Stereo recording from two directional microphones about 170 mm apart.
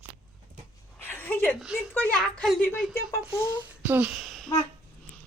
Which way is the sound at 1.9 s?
10° left (ahead or behind).